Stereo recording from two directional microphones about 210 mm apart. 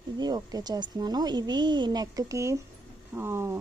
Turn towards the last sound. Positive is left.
turn(degrees=-10)  # may be behind; listen again after turning